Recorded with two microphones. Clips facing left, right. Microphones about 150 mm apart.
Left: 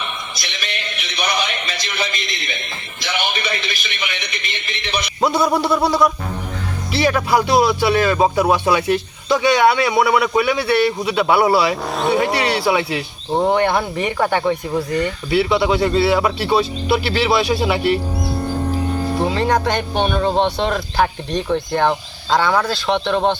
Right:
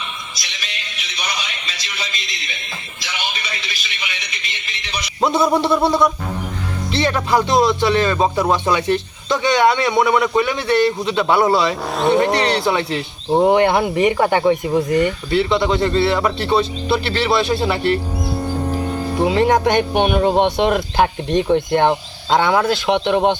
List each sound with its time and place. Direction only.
0.0 s music: 55° left (ahead or behind)
3.0 s a sound: 55° left (ahead or behind)
5.2 s a man's voice: centre (ahead or behind)
13.3 s speech: 15° right (ahead or behind)
15.3 s speech: 5° left (ahead or behind)
19.2 s speech: 20° right (ahead or behind)